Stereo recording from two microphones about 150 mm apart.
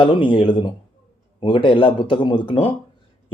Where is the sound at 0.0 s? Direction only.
30° left (ahead or behind).